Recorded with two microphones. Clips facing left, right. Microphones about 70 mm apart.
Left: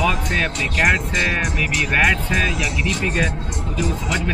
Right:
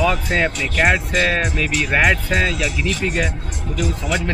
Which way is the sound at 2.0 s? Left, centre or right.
Centre.